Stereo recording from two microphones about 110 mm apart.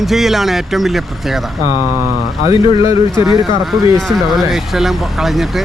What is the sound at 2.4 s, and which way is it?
Speech, 30° right (ahead or behind).